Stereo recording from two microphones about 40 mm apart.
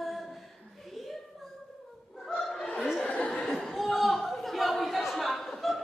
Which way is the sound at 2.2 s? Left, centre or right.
Centre.